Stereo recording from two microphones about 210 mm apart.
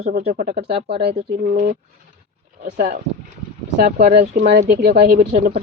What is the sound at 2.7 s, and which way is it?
Speech, 35° right (ahead or behind).